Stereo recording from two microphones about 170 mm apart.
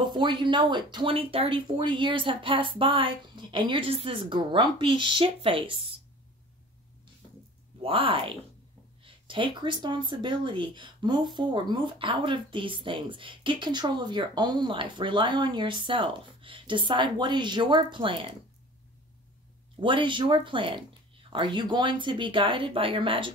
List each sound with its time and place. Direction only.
0.0 s speech: 25° right (ahead or behind)
7.8 s speech: 30° right (ahead or behind)
19.8 s speech: 30° right (ahead or behind)